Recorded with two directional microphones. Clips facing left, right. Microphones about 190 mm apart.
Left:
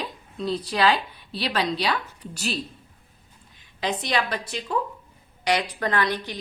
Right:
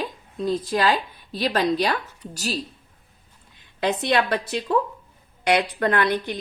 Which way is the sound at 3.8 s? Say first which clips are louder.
Right 4 dB; 60° right (ahead or behind).